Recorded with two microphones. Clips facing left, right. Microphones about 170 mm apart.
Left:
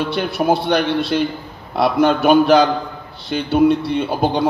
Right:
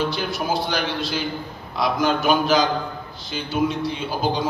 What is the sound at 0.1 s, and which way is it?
A man's voice, 65° left (ahead or behind).